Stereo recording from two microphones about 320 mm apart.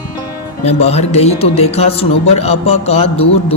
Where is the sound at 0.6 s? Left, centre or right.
Centre.